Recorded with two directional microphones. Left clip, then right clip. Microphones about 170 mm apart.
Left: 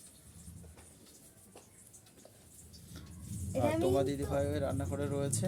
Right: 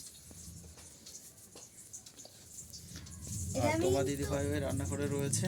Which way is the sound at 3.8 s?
15° left (ahead or behind).